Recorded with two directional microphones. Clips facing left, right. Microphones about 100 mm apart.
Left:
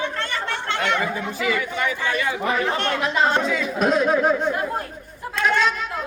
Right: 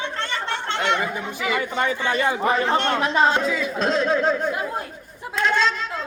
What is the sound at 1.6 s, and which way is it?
A man's voice, 30° right (ahead or behind).